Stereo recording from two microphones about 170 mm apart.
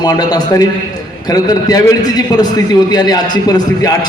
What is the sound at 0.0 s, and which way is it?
A man's voice, 25° left (ahead or behind).